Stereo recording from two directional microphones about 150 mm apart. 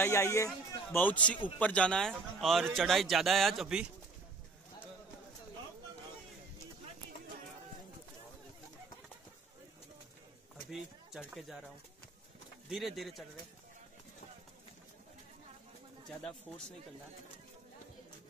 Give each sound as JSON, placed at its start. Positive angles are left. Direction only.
{"t": 0.0, "sound": "a man's voice", "side_deg": 15}
{"t": 10.7, "sound": "speech", "side_deg": 0}
{"t": 12.6, "sound": "a man's voice", "side_deg": 0}
{"t": 16.2, "sound": "a man's voice", "side_deg": 5}